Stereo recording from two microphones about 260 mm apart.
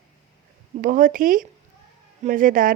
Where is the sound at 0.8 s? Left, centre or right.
Right.